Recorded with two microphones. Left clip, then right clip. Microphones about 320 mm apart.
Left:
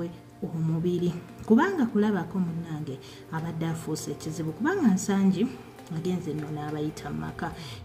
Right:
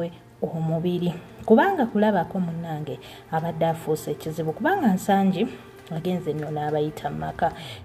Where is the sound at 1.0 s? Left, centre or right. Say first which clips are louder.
Right 6 dB; centre.